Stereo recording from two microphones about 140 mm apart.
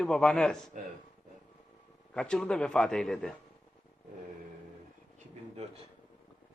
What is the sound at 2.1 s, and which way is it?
A man's voice, 5° left (ahead or behind).